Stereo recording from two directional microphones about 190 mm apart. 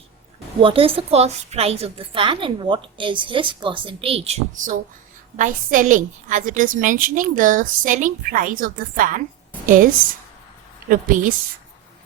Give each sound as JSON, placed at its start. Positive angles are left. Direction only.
{"t": 0.6, "sound": "a woman's voice", "side_deg": -30}